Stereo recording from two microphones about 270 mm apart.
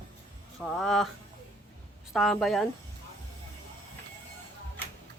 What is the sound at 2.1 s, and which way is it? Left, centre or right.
Speech, centre.